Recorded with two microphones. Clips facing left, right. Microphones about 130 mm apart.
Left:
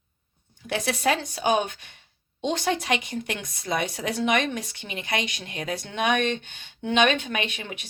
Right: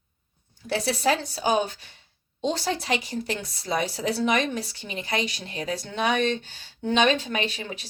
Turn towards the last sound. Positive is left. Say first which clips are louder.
# right 1 dB
turn(degrees=-35)  # may be behind; listen again after turning